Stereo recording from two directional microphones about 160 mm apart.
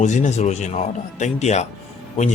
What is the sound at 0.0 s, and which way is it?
A man's voice, 50° left (ahead or behind).